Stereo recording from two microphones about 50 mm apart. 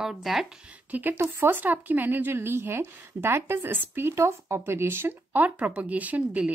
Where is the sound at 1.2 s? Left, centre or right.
Right.